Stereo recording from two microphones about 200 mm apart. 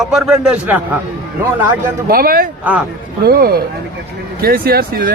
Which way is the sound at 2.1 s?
45° right (ahead or behind).